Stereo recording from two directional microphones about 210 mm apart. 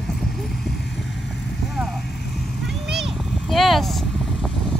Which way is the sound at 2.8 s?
Centre (ahead or behind).